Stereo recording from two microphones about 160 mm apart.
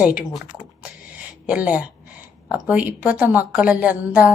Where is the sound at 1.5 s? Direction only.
10° right (ahead or behind).